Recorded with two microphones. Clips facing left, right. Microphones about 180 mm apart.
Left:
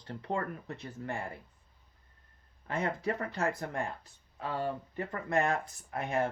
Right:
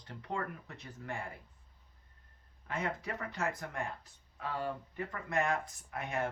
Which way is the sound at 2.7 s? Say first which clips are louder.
Left 5 dB; 30° left (ahead or behind).